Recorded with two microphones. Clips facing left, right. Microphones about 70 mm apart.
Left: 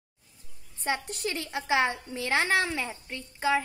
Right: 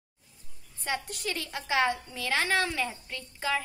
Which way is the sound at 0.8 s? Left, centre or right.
Left.